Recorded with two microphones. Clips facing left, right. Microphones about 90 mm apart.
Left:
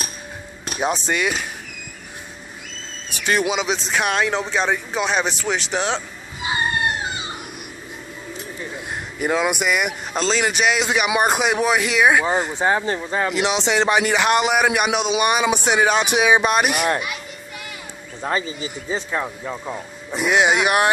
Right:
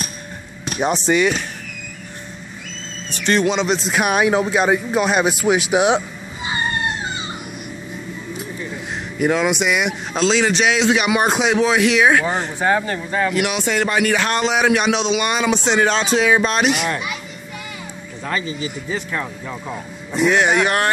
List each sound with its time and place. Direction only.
0.7 s a man's voice: centre (ahead or behind)
3.1 s a man's voice: 10° left (ahead or behind); by 6.0 s 15° right (ahead or behind)
9.4 s a man's voice: 10° left (ahead or behind)
9.7 s a man's voice: centre (ahead or behind)
18.2 s a man's voice: 25° left (ahead or behind)